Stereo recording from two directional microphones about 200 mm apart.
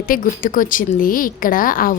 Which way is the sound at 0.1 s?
45° left (ahead or behind).